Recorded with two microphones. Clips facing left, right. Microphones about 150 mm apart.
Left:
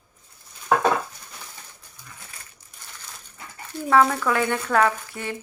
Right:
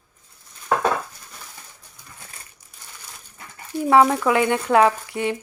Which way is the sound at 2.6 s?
15° right (ahead or behind).